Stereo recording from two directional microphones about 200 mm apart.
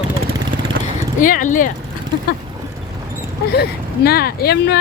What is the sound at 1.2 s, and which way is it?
Speech, 40° left (ahead or behind).